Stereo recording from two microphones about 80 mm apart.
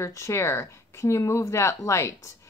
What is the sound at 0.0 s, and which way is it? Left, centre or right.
Speech, left.